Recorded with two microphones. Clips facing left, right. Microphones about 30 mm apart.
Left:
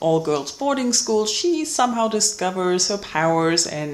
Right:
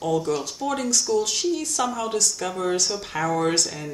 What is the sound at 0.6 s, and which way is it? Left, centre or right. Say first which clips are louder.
Speech: left 6 dB; centre.